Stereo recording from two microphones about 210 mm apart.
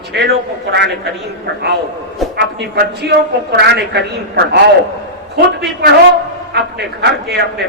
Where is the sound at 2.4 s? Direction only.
55° right (ahead or behind).